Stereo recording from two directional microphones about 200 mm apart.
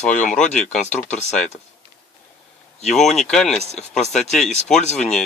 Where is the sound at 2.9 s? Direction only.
Centre (ahead or behind).